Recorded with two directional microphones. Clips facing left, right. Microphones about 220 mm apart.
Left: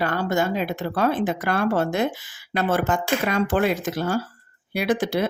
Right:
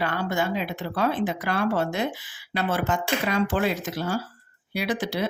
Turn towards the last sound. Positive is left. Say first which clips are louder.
# left 5 dB
turn(degrees=50)  # may be behind; listen again after turning